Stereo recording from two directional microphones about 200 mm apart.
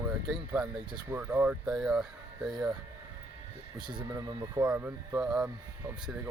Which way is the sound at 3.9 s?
20° right (ahead or behind).